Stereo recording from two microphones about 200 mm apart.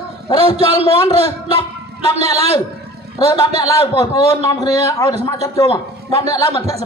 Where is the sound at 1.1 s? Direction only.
30° right (ahead or behind).